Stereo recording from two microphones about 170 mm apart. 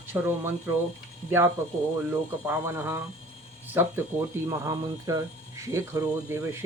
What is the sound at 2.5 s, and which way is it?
Speech, 15° right (ahead or behind).